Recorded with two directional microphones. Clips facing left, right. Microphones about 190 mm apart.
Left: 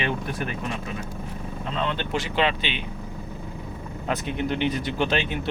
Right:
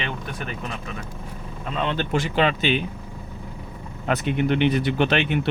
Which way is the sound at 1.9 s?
50° right (ahead or behind).